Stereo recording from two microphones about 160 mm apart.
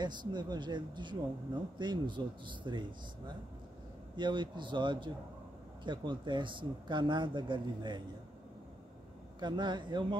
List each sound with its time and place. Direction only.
0.0 s speech: 30° right (ahead or behind)
4.2 s speech: 30° right (ahead or behind)
9.4 s speech: 30° right (ahead or behind)